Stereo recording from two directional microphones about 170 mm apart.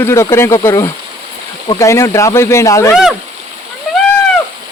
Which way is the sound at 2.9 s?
Centre (ahead or behind).